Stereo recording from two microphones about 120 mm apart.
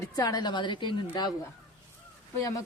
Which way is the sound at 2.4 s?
25° left (ahead or behind).